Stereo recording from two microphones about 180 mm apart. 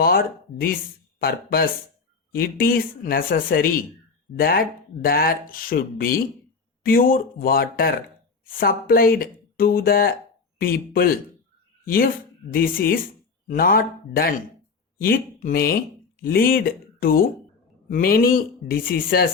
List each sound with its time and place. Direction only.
0.0 s speech: 55° left (ahead or behind)